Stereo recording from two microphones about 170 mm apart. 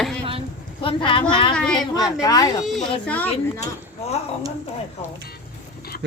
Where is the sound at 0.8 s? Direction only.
30° left (ahead or behind).